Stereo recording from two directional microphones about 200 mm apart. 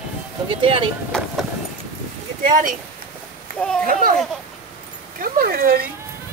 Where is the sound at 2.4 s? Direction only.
40° right (ahead or behind).